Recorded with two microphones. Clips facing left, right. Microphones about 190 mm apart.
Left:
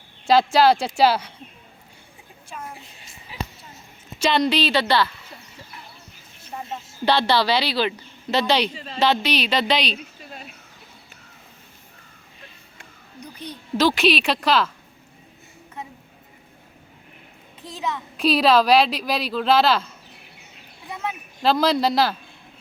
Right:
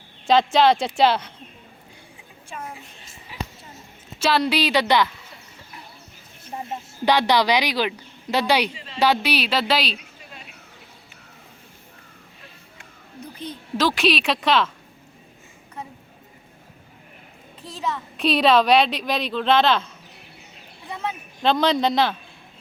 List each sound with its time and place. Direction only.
0.3 s a woman's voice: 5° left (ahead or behind)
4.2 s speech: 5° right (ahead or behind)
6.7 s speech: 15° right (ahead or behind)
8.7 s a woman's voice: 40° left (ahead or behind)
9.0 s a woman's voice: 10° right (ahead or behind)
13.1 s a sound: 15° left (ahead or behind)
13.8 s a woman's voice: centre (ahead or behind)
17.6 s a child's voice: 20° left (ahead or behind)
17.9 s a woman's voice: centre (ahead or behind)
21.4 s a woman's voice: 5° left (ahead or behind)